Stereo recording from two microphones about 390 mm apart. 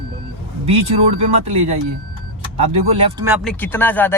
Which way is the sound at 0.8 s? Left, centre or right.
Right.